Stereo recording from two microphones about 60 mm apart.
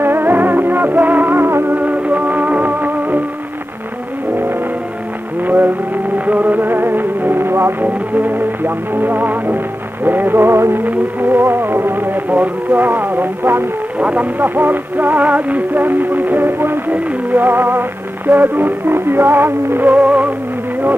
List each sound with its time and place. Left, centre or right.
0.0 s music: right
1.8 s music: right
5.4 s music: right
7.8 s music: right
13.9 s music: right
20.0 s music: right